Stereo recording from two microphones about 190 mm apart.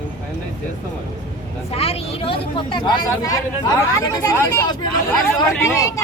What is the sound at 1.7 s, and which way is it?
Speech, 30° left (ahead or behind).